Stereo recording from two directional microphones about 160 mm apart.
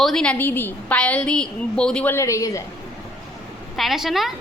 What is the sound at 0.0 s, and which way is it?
A woman's voice, 5° left (ahead or behind).